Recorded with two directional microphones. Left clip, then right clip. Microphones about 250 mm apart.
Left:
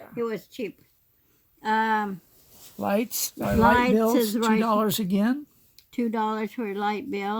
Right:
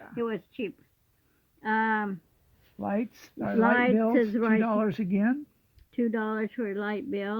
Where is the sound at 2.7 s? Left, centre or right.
Left.